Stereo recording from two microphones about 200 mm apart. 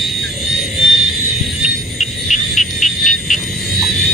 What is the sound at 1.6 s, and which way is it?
Music, 35° left (ahead or behind).